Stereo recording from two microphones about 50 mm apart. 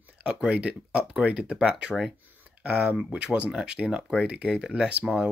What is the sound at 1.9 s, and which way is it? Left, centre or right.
Speech, centre.